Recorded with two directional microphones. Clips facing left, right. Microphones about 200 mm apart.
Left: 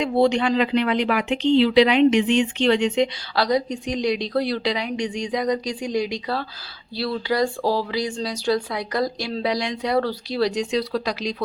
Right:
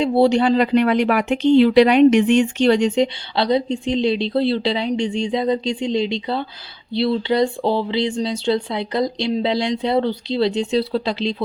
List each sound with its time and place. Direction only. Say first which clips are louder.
0.0 s speech: right 4 dB; 35° right (ahead or behind)